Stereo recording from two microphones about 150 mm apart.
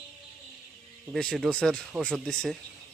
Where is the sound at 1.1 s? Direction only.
5° left (ahead or behind).